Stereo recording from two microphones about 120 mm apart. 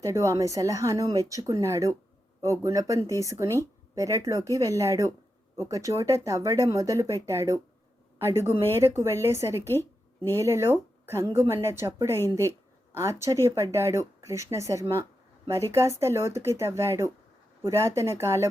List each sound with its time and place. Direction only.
0.0 s speech: 25° right (ahead or behind)